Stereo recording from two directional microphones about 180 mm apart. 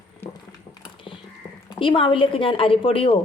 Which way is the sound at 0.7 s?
25° left (ahead or behind).